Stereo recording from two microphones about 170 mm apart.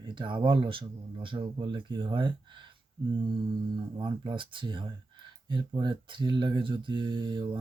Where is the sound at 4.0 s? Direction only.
30° right (ahead or behind).